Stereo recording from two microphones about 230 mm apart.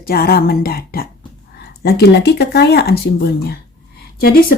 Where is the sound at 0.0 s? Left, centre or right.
Left.